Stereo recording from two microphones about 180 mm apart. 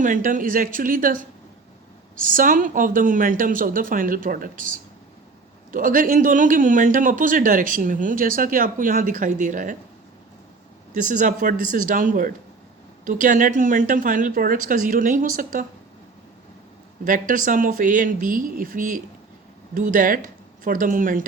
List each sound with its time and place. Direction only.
0.0 s speech: 45° right (ahead or behind)
10.9 s speech: 45° right (ahead or behind)
17.0 s speech: 45° right (ahead or behind)